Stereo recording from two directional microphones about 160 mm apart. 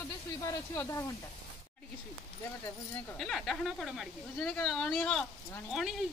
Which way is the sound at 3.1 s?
Centre (ahead or behind).